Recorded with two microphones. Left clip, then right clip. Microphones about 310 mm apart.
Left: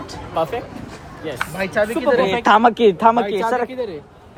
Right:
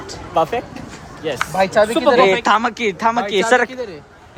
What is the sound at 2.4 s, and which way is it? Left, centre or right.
Speech, centre.